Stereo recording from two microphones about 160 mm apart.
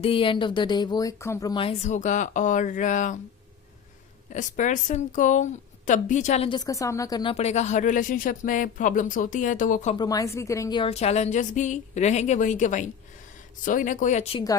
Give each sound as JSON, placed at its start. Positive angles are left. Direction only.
{"t": 0.0, "sound": "speech", "side_deg": 35}
{"t": 1.5, "sound": "a woman's voice", "side_deg": 40}
{"t": 4.3, "sound": "a woman's voice", "side_deg": 50}
{"t": 6.5, "sound": "speech", "side_deg": 20}
{"t": 7.3, "sound": "speech", "side_deg": 45}
{"t": 9.9, "sound": "speech", "side_deg": 25}
{"t": 10.8, "sound": "a woman's voice", "side_deg": 40}